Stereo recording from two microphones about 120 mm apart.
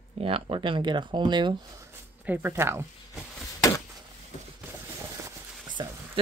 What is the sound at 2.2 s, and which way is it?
Speech, 15° right (ahead or behind).